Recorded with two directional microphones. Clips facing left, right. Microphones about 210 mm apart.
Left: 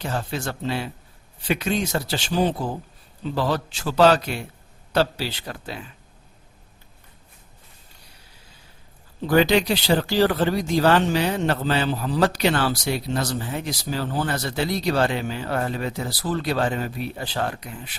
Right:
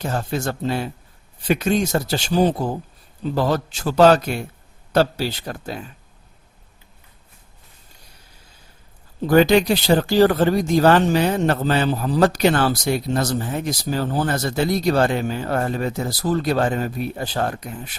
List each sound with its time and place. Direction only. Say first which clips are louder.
0.0 s speech: right 4 dB; 45° right (ahead or behind)
9.2 s speech: right 4 dB; 45° right (ahead or behind)